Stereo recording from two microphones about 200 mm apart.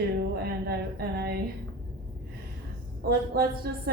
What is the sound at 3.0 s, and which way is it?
Speech, 50° right (ahead or behind).